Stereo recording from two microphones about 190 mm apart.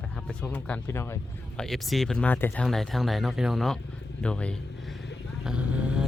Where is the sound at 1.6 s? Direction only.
Centre (ahead or behind).